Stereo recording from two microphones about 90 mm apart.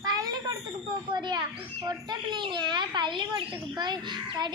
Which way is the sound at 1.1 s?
50° right (ahead or behind).